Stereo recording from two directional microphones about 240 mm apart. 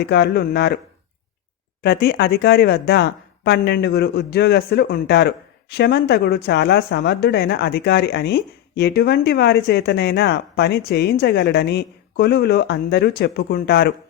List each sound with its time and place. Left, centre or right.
0.0 s speech: left
1.8 s speech: left